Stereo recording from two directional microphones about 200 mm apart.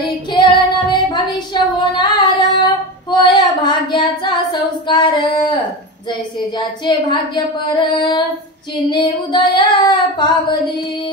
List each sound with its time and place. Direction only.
0.3 s child singing: 25° left (ahead or behind)
6.0 s speech: 20° left (ahead or behind)